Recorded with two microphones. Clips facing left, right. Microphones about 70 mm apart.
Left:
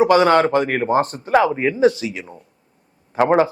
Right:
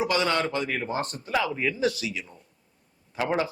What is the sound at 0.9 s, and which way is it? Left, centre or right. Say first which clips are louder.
Speech: left 12 dB; left.